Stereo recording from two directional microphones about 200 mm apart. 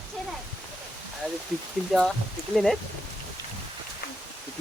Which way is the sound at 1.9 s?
Centre (ahead or behind).